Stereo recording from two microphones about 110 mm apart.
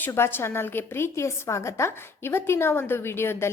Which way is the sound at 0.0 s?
20° left (ahead or behind).